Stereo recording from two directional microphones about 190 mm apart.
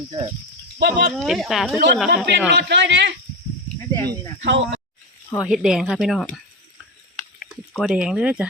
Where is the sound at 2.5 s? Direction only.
65° right (ahead or behind).